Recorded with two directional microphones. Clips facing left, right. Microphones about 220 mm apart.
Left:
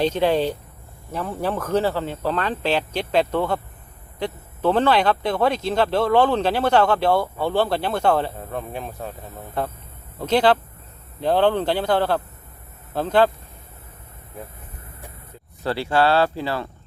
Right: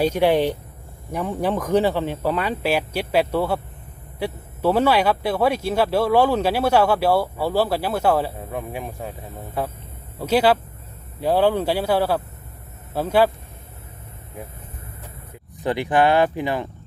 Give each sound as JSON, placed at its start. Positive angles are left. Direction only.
{"t": 0.0, "sound": "speech", "side_deg": -10}
{"t": 10.2, "sound": "speech", "side_deg": -10}
{"t": 15.6, "sound": "speech", "side_deg": -15}